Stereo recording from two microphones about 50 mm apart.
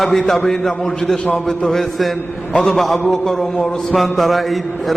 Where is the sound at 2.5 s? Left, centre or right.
Centre.